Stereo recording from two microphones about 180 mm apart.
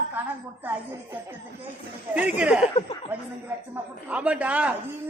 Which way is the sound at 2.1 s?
5° right (ahead or behind).